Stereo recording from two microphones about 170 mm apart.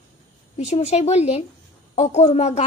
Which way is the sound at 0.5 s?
40° left (ahead or behind).